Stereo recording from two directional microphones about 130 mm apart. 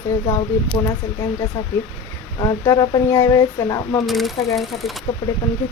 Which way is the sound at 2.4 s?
30° left (ahead or behind).